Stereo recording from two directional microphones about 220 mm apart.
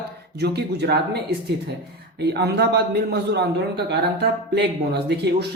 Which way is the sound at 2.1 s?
50° right (ahead or behind).